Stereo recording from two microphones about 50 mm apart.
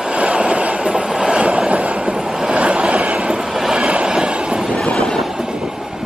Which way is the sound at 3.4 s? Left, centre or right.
Centre.